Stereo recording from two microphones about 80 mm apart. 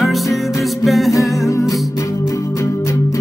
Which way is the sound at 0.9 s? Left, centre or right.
Centre.